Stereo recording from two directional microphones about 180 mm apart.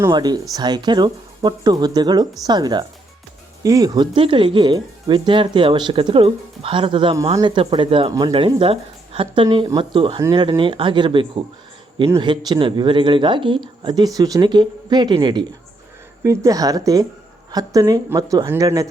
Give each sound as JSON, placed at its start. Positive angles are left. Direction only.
{"t": 0.0, "sound": "speech", "side_deg": -25}